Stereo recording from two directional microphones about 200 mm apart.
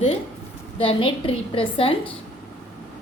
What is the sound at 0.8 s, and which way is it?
A woman's voice, 25° left (ahead or behind).